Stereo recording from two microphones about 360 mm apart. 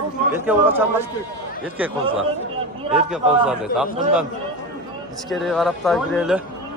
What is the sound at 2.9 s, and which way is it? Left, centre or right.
A man's voice, centre.